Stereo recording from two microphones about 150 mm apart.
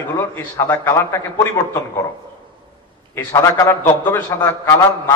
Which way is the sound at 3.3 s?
20° left (ahead or behind).